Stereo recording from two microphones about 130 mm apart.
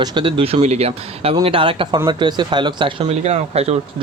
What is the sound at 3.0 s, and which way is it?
Speech, 55° right (ahead or behind).